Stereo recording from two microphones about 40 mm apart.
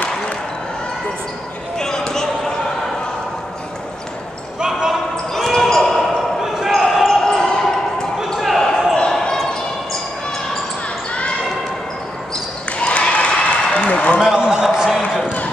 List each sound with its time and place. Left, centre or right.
1.8 s basketball bounce: centre
4.6 s basketball bounce: centre
5.1 s basketball bounce: centre
7.1 s basketball bounce: centre
8.4 s basketball bounce: centre
9.1 s basketball bounce: centre
12.7 s a sound: left
14.3 s a sound: centre
14.7 s a sound: centre